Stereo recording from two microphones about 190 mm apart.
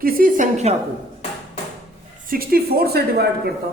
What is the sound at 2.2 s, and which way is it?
A woman's voice, 50° right (ahead or behind).